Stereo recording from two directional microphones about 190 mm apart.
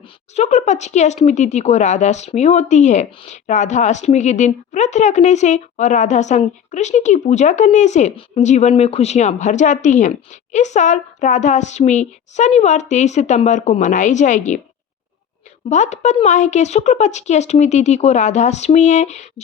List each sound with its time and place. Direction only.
0.3 s speech: 40° left (ahead or behind)
15.7 s speech: 40° left (ahead or behind)